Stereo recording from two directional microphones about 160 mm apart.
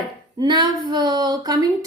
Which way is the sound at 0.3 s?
30° right (ahead or behind).